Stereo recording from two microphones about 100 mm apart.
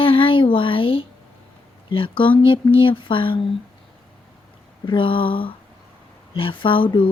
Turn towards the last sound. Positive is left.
turn(degrees=60)  # may be behind; listen again after turning